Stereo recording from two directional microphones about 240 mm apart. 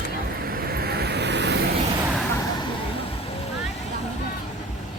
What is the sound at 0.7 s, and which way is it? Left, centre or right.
Vehicle, right.